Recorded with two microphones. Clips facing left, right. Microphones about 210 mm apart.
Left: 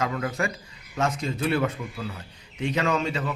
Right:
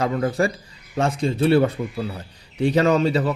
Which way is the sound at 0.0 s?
35° right (ahead or behind).